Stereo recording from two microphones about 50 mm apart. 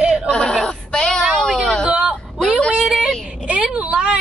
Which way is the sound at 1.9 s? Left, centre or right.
Right.